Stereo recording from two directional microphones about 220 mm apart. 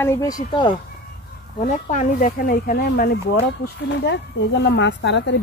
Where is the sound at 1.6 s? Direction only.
35° left (ahead or behind).